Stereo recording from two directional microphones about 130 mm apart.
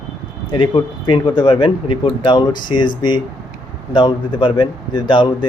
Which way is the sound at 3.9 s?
40° left (ahead or behind).